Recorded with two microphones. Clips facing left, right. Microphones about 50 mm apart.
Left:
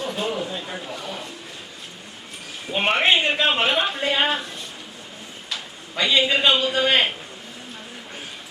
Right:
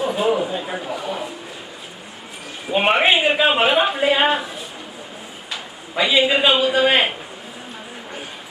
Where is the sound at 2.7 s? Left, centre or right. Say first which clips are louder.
Right 3 dB; centre.